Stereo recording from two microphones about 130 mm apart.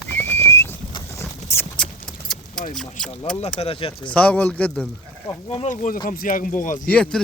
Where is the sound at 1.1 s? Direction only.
20° left (ahead or behind).